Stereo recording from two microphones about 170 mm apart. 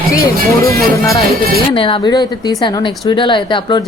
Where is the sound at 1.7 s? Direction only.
30° left (ahead or behind).